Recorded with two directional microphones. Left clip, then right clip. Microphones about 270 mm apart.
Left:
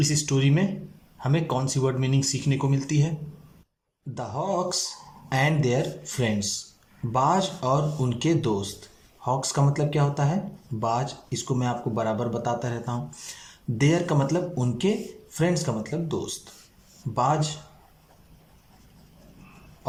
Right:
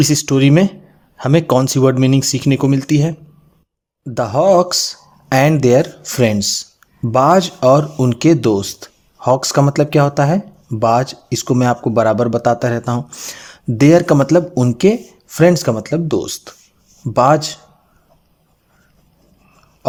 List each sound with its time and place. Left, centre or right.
0.0 s speech: right